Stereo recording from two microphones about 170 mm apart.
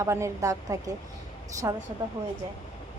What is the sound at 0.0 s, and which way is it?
A child's voice, 15° right (ahead or behind).